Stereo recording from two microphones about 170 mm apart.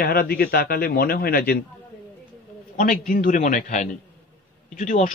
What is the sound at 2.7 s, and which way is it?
A man's voice, 45° left (ahead or behind).